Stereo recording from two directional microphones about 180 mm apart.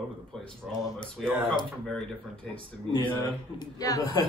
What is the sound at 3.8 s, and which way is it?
Speech, 20° left (ahead or behind).